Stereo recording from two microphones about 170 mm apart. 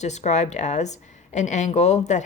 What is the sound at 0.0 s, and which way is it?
Speech, 40° left (ahead or behind).